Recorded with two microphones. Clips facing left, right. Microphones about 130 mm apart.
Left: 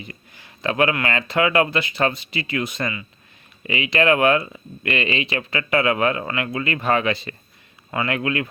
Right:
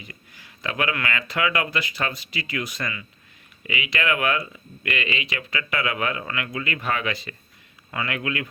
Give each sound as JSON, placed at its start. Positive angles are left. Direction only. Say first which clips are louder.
{"t": 0.0, "sound": "speech", "louder": "left 5 dB", "side_deg": 25}